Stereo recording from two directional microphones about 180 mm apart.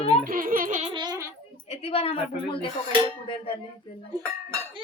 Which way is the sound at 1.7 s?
35° left (ahead or behind).